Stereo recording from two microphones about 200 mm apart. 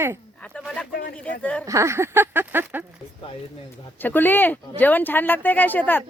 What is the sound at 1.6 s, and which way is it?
Speech, 15° right (ahead or behind).